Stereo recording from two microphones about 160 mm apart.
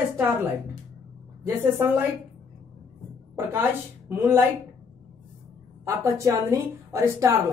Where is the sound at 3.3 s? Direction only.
15° right (ahead or behind).